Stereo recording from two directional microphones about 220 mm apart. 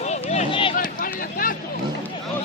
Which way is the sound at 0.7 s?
40° left (ahead or behind).